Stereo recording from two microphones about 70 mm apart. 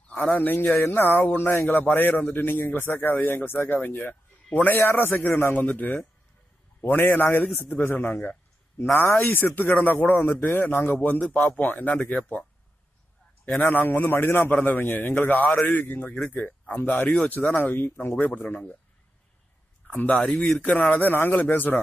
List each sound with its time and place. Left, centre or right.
0.1 s speech: centre
0.4 s a man's voice: left
13.7 s a man's voice: left
14.5 s speech: left
19.9 s speech: left